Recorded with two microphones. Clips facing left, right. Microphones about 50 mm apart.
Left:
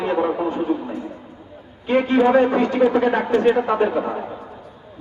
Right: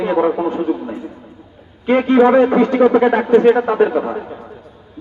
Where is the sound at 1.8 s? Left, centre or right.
Right.